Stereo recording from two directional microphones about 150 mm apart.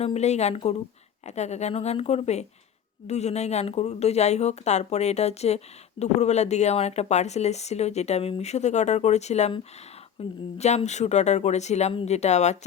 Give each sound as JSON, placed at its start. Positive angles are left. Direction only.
{"t": 0.0, "sound": "speech", "side_deg": 45}